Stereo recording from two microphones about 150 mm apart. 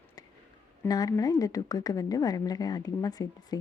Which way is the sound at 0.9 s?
25° left (ahead or behind).